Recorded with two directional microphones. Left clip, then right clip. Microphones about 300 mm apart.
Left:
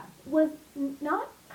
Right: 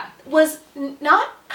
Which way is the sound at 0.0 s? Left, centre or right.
Centre.